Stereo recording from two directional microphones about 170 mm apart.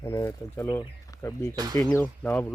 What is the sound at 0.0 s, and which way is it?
Speech, 15° left (ahead or behind).